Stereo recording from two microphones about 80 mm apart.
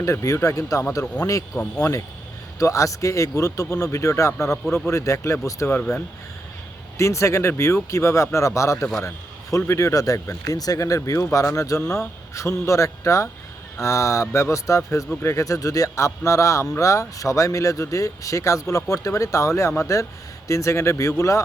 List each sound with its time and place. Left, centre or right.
0.0 s speech: left
6.9 s speech: left
8.8 s a man's voice: centre
9.0 s speech: left
11.8 s a man's voice: centre
12.3 s speech: left